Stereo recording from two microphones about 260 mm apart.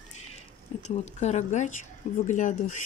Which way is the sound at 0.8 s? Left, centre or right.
Left.